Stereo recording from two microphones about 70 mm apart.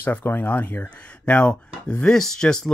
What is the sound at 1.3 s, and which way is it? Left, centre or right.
Speech, centre.